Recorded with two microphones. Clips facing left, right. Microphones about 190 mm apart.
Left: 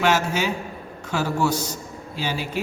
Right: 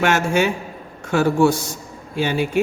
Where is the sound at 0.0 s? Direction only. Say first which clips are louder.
Right 4 dB; 55° right (ahead or behind).